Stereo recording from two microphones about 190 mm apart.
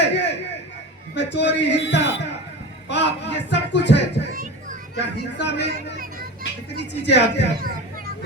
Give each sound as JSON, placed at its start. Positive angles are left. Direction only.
{"t": 0.0, "sound": "a sound", "side_deg": 65}
{"t": 1.1, "sound": "a man's voice", "side_deg": 65}
{"t": 6.7, "sound": "a man's voice", "side_deg": 65}